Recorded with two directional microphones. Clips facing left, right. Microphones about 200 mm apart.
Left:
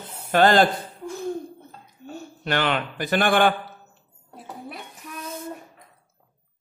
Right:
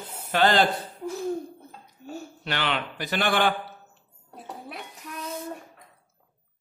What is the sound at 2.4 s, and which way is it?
A man's voice, 50° left (ahead or behind).